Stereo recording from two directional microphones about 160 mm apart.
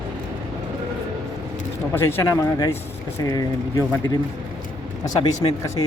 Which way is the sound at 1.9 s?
15° left (ahead or behind).